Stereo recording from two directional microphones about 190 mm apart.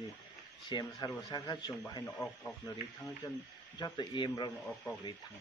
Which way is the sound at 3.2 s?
15° left (ahead or behind).